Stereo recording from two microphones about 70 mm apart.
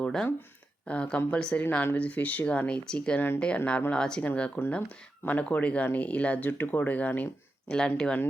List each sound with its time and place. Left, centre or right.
0.0 s speech: centre
3.2 s speech: left
3.7 s speech: left
7.7 s speech: centre